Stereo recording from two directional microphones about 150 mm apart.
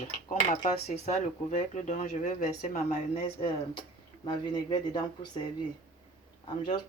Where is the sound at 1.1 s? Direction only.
55° left (ahead or behind).